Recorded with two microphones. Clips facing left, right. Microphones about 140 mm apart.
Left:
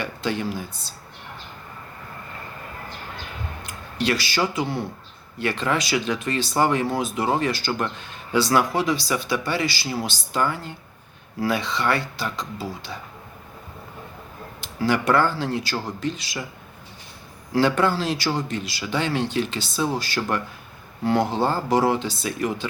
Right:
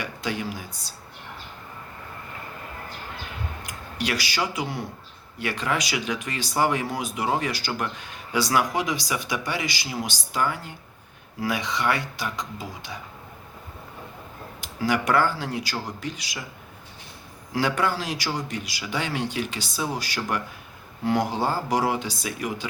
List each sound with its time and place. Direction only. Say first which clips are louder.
0.0 s speech: left 3 dB; 10° right (ahead or behind)
3.6 s speech: left 5 dB; 10° right (ahead or behind)
14.8 s speech: left 2 dB; 10° right (ahead or behind)
17.5 s speech: left 4 dB; 10° right (ahead or behind)